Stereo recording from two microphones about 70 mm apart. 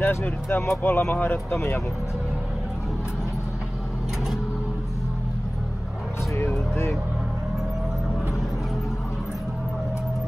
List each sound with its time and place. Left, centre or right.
0.0 s speech: left
6.3 s music: left